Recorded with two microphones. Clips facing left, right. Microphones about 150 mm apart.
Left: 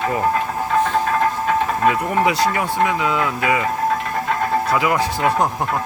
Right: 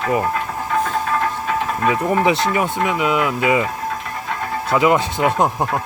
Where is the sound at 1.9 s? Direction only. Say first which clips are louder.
Right 4 dB; 25° right (ahead or behind).